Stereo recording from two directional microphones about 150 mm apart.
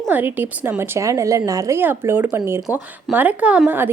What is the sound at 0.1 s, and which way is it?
A woman's voice, 10° right (ahead or behind).